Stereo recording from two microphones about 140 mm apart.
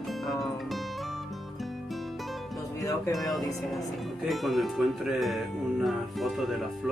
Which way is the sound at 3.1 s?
Centre (ahead or behind).